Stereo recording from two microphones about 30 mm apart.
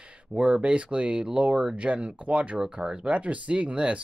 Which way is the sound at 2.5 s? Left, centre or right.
Right.